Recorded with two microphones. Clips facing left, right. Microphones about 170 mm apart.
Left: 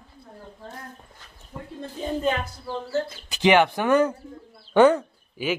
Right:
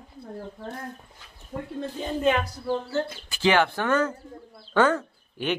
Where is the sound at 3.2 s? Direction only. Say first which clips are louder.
Left 4 dB; 15° left (ahead or behind).